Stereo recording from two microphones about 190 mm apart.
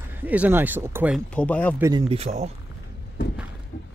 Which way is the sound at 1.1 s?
5° left (ahead or behind).